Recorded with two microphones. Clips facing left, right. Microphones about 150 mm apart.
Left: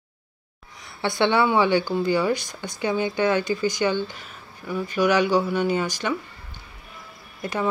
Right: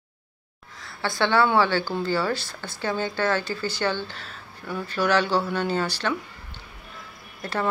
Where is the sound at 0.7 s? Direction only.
20° left (ahead or behind).